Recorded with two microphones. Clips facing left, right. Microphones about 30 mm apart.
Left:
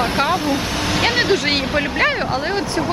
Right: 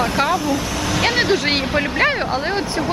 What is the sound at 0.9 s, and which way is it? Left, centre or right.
Speech, centre.